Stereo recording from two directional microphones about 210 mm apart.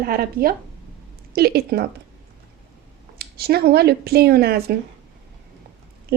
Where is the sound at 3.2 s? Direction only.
50° right (ahead or behind).